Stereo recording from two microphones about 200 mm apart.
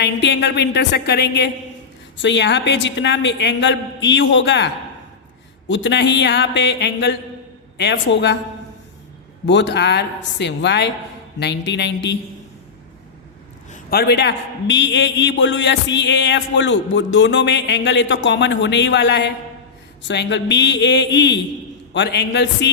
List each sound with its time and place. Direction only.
0.0 s a man's voice: 60° left (ahead or behind)
9.5 s a man's voice: 60° left (ahead or behind)
13.7 s a sound: 40° left (ahead or behind)
14.0 s a man's voice: 55° left (ahead or behind)